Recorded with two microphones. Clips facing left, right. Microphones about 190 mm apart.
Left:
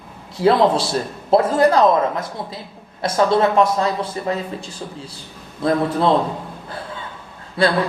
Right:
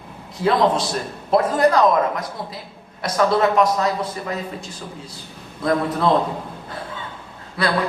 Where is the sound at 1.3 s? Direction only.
30° left (ahead or behind).